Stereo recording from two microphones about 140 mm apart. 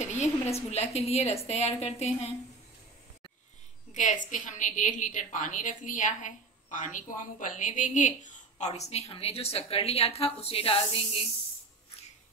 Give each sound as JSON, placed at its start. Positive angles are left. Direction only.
{"t": 0.0, "sound": "a woman's voice", "side_deg": 50}
{"t": 3.9, "sound": "a woman's voice", "side_deg": 65}